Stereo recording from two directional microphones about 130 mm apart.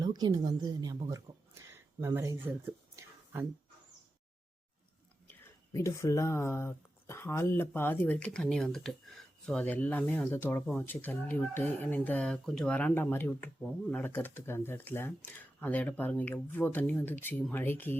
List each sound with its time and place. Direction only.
0.0 s a woman's voice: 30° right (ahead or behind)
1.1 s a sound: 20° right (ahead or behind)
5.3 s speech: 20° left (ahead or behind)